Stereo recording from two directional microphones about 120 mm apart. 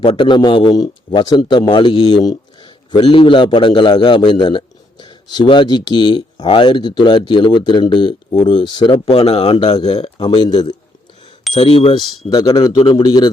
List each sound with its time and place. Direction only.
0.0 s a man's voice: 40° left (ahead or behind)
9.1 s a man's voice: 55° left (ahead or behind)
9.9 s a man's voice: 45° left (ahead or behind)
11.5 s speech: 55° left (ahead or behind)
12.3 s a man's voice: 30° left (ahead or behind)